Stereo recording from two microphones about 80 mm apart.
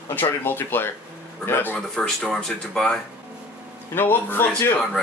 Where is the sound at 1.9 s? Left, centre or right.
Centre.